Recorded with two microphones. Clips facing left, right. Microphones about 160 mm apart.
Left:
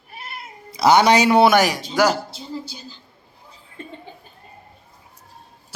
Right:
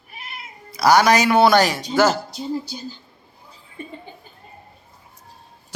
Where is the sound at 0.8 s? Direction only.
25° left (ahead or behind).